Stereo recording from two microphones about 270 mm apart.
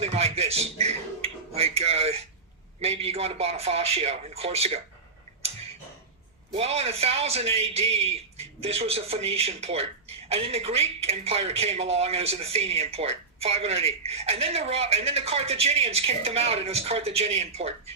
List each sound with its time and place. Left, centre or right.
0.0 s a man's voice: right
6.5 s speech: right